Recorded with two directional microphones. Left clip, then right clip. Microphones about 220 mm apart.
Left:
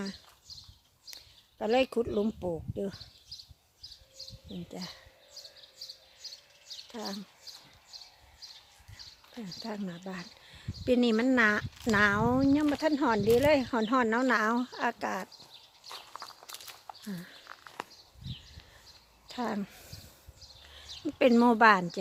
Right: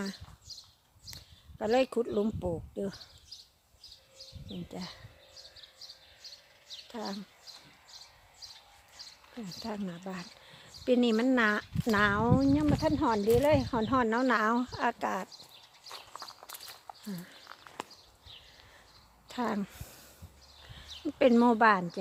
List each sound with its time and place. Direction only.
0.5 s horse: 30° right (ahead or behind)
1.1 s speech: 5° left (ahead or behind)
4.7 s speech: centre (ahead or behind)
6.9 s speech: 5° right (ahead or behind)
9.6 s speech: centre (ahead or behind)
10.4 s a sound: centre (ahead or behind)
10.8 s speech: 5° left (ahead or behind)
15.9 s walk: 5° left (ahead or behind)
19.3 s a sound: 5° right (ahead or behind)
20.7 s speech: 5° left (ahead or behind)